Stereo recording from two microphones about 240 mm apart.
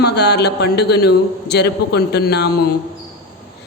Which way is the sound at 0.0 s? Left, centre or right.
Left.